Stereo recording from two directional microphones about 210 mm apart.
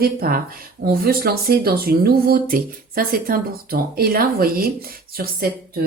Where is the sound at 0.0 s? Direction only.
45° right (ahead or behind).